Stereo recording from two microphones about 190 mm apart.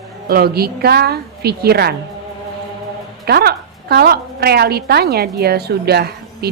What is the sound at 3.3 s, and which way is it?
A woman's voice, 55° right (ahead or behind).